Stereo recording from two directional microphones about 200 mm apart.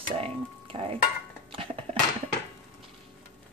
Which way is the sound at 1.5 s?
25° right (ahead or behind).